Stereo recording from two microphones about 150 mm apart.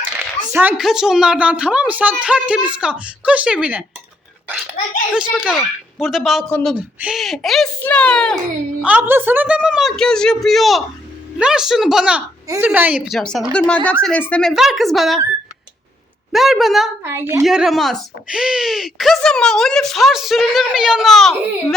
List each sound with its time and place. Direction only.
0.5 s a woman's voice: 10° right (ahead or behind)
5.1 s speech: 5° right (ahead or behind)
8.8 s speech: 10° right (ahead or behind)
12.5 s a woman's voice: 15° right (ahead or behind)
13.3 s speech: 5° left (ahead or behind)
14.5 s speech: centre (ahead or behind)
16.3 s speech: centre (ahead or behind)
17.0 s a woman's voice: 15° right (ahead or behind)
17.4 s speech: centre (ahead or behind)